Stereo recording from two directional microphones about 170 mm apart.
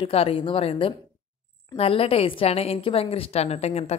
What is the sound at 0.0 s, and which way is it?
Speech, 35° left (ahead or behind).